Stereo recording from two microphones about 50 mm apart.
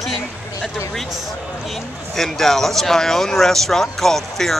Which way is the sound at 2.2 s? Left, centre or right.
Centre.